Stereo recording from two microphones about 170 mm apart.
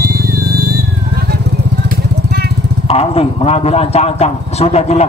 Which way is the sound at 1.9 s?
65° right (ahead or behind).